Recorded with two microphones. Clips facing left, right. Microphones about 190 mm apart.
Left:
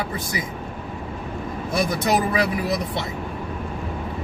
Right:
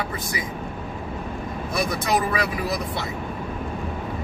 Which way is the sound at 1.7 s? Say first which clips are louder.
Left 2 dB; 25° left (ahead or behind).